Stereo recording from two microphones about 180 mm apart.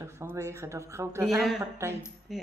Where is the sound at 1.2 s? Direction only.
Centre (ahead or behind).